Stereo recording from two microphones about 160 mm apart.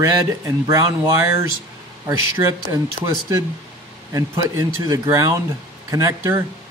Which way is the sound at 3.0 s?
20° right (ahead or behind).